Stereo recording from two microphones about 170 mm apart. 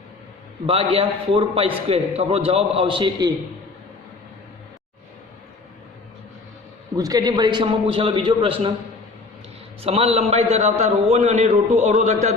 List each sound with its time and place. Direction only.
0.7 s a man's voice: 35° right (ahead or behind)
6.9 s a man's voice: 20° right (ahead or behind)
9.8 s a man's voice: 35° right (ahead or behind)